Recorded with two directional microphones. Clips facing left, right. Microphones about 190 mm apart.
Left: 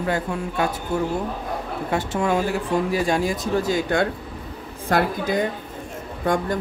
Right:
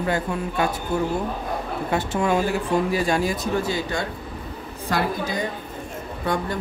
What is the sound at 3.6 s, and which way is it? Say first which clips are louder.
Speech: left 4 dB; 45° left (ahead or behind).